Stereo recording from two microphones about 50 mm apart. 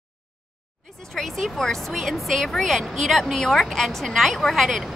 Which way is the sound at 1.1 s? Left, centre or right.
Centre.